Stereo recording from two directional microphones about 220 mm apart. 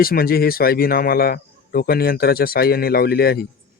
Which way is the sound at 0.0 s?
40° left (ahead or behind).